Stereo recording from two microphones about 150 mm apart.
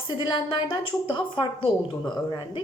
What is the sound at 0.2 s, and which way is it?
A woman's voice, 35° left (ahead or behind).